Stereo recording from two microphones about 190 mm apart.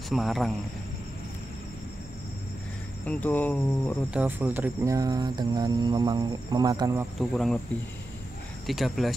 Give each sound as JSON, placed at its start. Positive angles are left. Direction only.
{"t": 0.1, "sound": "speech", "side_deg": 0}
{"t": 3.1, "sound": "speech", "side_deg": 10}
{"t": 4.1, "sound": "speech", "side_deg": -10}
{"t": 7.2, "sound": "speech", "side_deg": 0}
{"t": 8.6, "sound": "speech", "side_deg": 0}